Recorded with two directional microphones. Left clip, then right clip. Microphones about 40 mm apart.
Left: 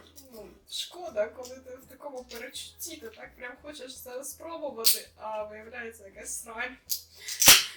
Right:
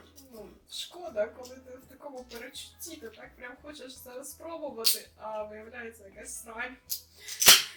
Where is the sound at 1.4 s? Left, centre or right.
Centre.